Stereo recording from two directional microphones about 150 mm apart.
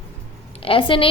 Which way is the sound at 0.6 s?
35° left (ahead or behind).